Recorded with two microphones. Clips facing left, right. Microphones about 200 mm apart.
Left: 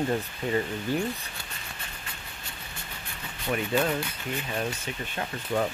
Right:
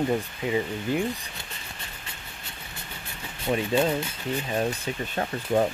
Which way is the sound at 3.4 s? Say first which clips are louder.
Right 3 dB; 25° right (ahead or behind).